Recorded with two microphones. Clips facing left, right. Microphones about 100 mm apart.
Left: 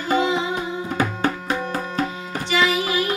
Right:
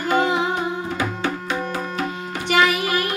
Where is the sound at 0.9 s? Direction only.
45° left (ahead or behind).